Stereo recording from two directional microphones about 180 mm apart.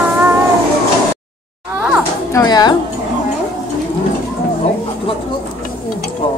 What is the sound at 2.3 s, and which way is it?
Speech, 20° left (ahead or behind).